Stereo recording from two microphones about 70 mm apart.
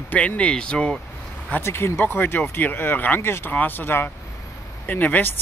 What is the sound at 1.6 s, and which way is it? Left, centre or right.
Speech, left.